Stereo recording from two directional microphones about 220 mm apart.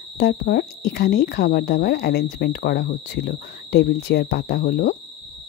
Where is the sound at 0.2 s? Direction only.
45° left (ahead or behind).